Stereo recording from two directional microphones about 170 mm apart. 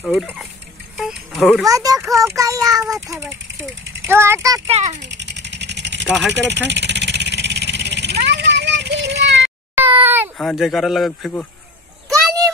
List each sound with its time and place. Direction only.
0.2 s speech: centre (ahead or behind)
0.9 s music: centre (ahead or behind)
1.7 s a child's voice: 20° right (ahead or behind)
4.6 s a child's voice: 40° right (ahead or behind)
5.0 s vehicle: 90° right
9.8 s a sound: 10° right (ahead or behind)
10.3 s speech: centre (ahead or behind)